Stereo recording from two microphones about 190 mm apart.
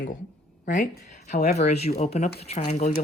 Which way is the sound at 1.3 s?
40° left (ahead or behind).